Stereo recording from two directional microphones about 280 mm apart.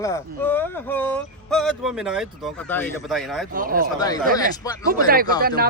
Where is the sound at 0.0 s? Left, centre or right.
Centre.